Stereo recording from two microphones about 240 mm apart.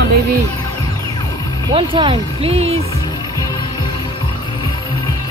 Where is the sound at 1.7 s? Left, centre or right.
Right.